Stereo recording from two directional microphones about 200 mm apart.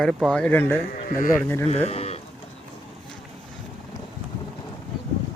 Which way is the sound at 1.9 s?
30° left (ahead or behind).